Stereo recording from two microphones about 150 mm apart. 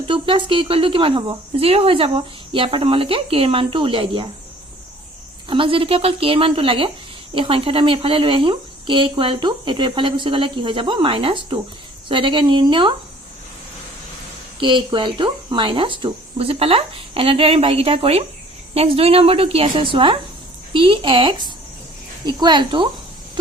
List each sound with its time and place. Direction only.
0.1 s speech: 35° right (ahead or behind)
5.5 s speech: 35° right (ahead or behind)
14.6 s speech: 30° right (ahead or behind)